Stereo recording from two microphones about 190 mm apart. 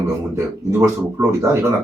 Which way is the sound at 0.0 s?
15° right (ahead or behind).